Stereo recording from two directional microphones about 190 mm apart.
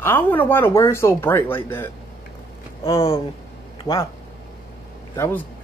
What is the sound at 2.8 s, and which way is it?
Speech, 15° left (ahead or behind).